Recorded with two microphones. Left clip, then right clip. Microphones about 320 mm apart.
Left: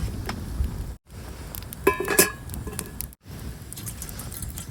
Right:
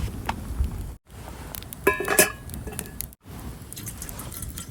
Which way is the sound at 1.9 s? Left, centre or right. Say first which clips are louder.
Right 1 dB; centre.